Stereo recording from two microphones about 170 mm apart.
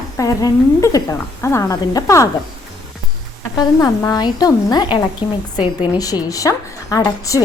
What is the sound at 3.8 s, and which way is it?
A woman's voice, 20° left (ahead or behind).